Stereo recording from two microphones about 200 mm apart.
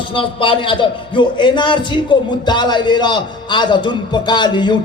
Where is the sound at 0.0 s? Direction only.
25° left (ahead or behind).